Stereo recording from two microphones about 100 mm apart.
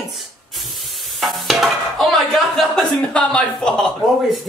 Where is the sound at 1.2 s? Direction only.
Centre (ahead or behind).